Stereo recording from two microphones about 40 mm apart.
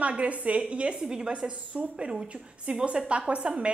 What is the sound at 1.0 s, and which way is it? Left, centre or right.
Speech, centre.